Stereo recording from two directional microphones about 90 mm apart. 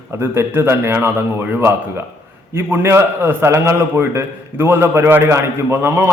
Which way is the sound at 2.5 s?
30° right (ahead or behind).